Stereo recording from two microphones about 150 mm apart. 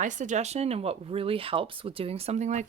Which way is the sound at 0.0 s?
55° right (ahead or behind).